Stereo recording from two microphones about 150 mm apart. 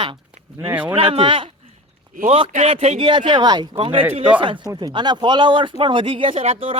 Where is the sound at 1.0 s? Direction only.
35° right (ahead or behind).